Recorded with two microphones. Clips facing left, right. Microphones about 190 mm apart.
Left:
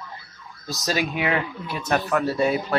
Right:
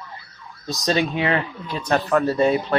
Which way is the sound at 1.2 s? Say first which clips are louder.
Right 2 dB; 15° left (ahead or behind).